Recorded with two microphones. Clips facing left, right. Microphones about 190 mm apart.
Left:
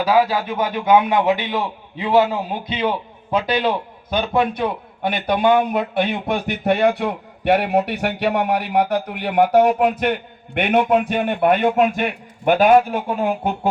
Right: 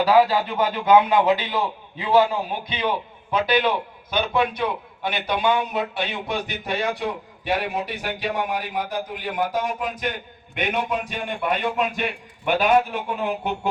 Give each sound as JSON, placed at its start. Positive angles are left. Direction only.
{"t": 0.0, "sound": "a man's voice", "side_deg": 10}
{"t": 3.4, "sound": "a man's voice", "side_deg": 35}